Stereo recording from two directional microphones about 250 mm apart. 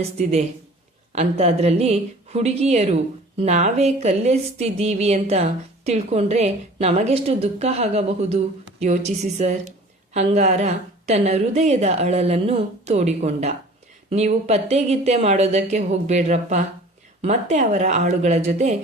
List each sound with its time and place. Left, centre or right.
0.2 s speech: right